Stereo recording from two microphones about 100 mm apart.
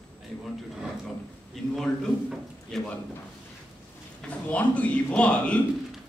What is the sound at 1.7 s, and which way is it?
A man's voice, 5° left (ahead or behind).